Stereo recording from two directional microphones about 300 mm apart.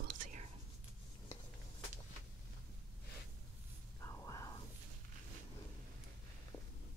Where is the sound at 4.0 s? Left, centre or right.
Centre.